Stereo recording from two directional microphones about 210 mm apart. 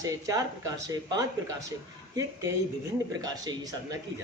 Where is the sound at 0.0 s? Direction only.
15° right (ahead or behind).